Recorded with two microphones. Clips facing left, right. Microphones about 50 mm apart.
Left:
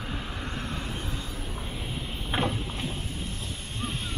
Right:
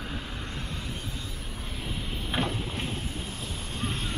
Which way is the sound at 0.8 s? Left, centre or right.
Left.